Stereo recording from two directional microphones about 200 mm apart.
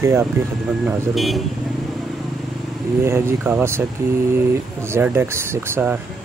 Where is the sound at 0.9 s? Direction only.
Centre (ahead or behind).